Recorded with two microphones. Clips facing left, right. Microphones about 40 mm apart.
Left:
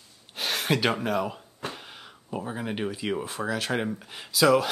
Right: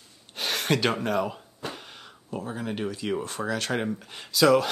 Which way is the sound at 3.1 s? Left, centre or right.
Centre.